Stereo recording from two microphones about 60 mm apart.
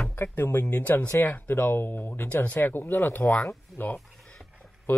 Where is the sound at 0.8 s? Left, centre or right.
Left.